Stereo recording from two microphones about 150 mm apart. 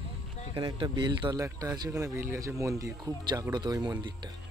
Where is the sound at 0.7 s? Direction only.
30° right (ahead or behind).